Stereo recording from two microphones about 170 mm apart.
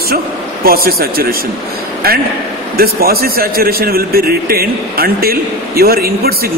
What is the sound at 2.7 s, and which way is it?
A man's voice, 60° right (ahead or behind).